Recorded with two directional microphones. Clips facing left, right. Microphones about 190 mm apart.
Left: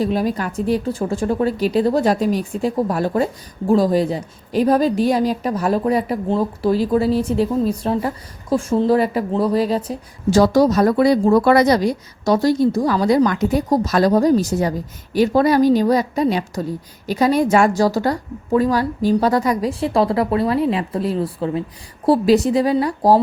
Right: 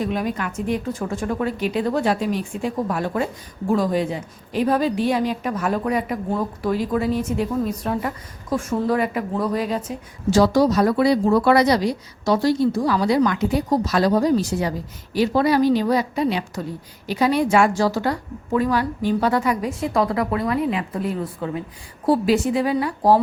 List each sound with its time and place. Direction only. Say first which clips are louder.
0.0 s a woman's voice: left 4 dB; 35° left (ahead or behind)